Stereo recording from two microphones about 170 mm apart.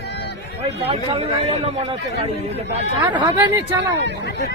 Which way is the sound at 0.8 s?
35° right (ahead or behind).